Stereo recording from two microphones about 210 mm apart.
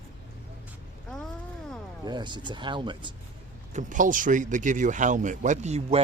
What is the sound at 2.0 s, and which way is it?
Speech, 20° right (ahead or behind).